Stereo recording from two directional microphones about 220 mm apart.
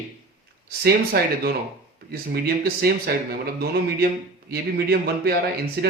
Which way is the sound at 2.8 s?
45° right (ahead or behind).